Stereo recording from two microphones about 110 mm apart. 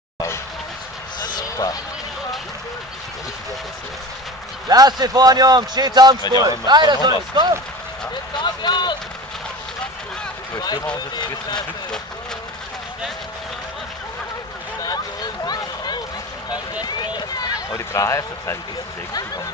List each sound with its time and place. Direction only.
1.2 s vehicle: 35° left (ahead or behind)
4.6 s speech: 35° right (ahead or behind)
8.4 s speech: 45° left (ahead or behind)
10.5 s speech: 35° left (ahead or behind)
15.4 s a sound: 40° left (ahead or behind)
16.8 s run: 40° left (ahead or behind)